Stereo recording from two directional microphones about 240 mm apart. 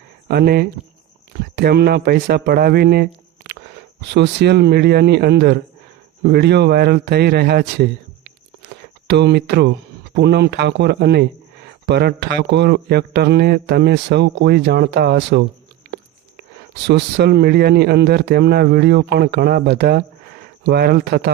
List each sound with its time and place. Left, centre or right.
0.3 s a man's voice: right
8.7 s a sound: right
10.2 s a man's voice: right